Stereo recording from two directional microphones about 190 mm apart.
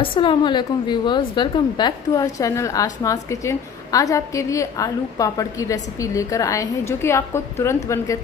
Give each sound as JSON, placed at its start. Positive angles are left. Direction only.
{"t": 0.0, "sound": "a woman's voice", "side_deg": 25}